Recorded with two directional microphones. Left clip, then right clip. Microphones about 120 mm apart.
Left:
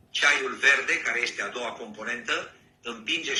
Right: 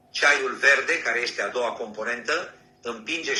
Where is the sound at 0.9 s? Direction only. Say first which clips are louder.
Right 2 dB; 15° left (ahead or behind).